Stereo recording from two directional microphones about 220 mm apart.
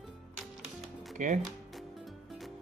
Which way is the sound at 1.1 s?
35° right (ahead or behind).